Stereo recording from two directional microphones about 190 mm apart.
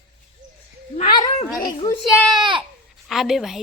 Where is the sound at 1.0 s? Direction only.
25° left (ahead or behind).